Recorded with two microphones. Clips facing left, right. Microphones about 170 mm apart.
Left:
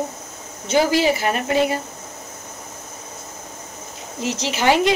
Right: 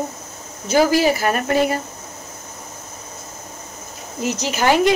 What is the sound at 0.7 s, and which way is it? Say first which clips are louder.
Speech: right 2 dB; 40° right (ahead or behind).